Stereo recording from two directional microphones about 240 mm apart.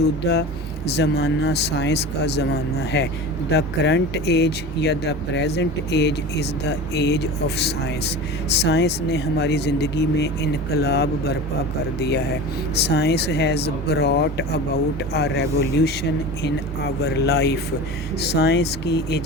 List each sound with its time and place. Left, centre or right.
0.2 s speech: left